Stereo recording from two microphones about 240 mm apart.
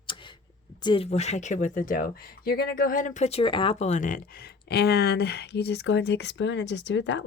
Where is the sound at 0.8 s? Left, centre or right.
Left.